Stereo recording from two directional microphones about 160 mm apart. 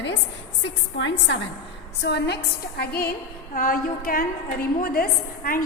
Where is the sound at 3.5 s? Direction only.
60° left (ahead or behind).